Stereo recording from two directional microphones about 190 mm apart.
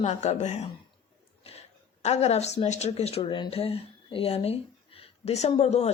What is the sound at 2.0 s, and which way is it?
Speech, 35° left (ahead or behind).